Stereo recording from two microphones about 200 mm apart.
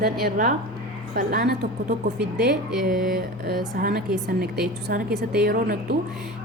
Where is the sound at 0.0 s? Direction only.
45° right (ahead or behind).